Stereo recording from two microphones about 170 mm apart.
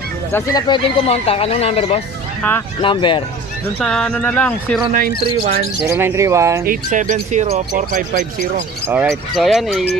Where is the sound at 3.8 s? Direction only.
5° left (ahead or behind).